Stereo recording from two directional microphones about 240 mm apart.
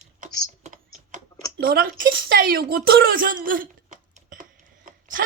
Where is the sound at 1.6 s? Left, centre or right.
Right.